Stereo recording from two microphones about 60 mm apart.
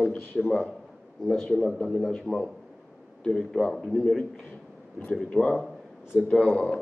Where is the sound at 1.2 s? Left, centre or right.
Centre.